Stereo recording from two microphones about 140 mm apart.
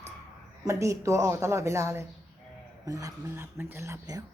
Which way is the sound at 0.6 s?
20° right (ahead or behind).